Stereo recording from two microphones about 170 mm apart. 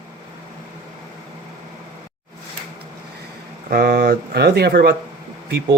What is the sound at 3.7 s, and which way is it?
Speech, 65° right (ahead or behind).